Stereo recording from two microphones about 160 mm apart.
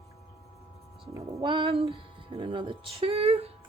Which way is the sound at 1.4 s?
35° right (ahead or behind).